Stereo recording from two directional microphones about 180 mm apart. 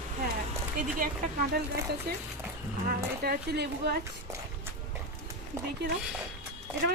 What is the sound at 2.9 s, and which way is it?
Speech, 60° right (ahead or behind).